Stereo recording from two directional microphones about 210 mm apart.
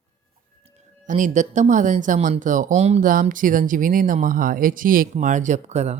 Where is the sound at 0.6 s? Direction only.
30° right (ahead or behind).